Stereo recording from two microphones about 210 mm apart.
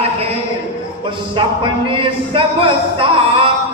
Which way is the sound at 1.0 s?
25° right (ahead or behind).